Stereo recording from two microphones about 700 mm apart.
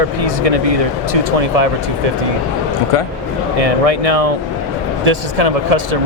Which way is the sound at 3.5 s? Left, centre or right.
Right.